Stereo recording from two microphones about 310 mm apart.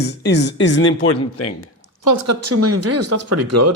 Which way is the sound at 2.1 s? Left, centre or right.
Right.